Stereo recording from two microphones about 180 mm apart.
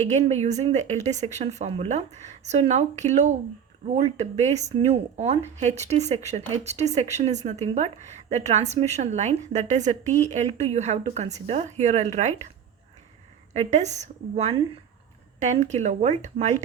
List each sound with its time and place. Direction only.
0.1 s speech: 40° right (ahead or behind)
13.5 s speech: 40° right (ahead or behind)